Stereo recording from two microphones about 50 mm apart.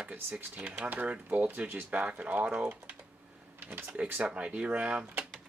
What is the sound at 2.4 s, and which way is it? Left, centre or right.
Speech, centre.